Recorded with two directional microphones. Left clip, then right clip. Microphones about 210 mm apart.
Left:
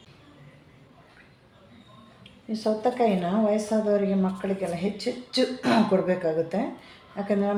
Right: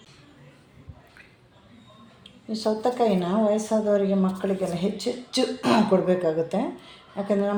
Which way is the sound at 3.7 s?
20° right (ahead or behind).